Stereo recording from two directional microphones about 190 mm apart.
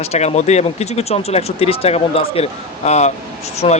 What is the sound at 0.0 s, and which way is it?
Speech, 35° left (ahead or behind).